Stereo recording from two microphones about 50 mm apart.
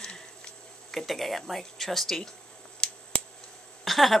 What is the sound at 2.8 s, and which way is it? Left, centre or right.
Scissors, centre.